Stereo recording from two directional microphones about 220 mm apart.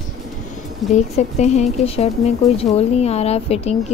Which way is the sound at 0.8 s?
Centre (ahead or behind).